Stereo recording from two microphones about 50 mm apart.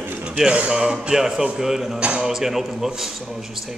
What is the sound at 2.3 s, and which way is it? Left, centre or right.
A man's voice, centre.